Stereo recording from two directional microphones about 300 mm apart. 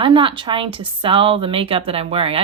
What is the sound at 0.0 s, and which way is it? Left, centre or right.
A woman's voice, centre.